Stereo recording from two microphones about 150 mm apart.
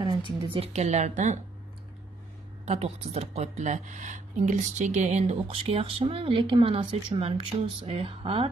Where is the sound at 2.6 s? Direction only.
45° right (ahead or behind).